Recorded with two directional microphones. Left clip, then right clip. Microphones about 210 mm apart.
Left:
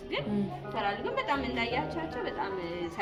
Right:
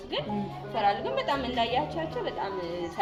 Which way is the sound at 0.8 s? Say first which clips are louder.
Right 5 dB; 30° left (ahead or behind).